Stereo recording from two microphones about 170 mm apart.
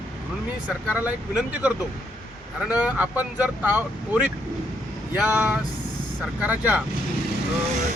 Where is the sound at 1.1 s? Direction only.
10° right (ahead or behind).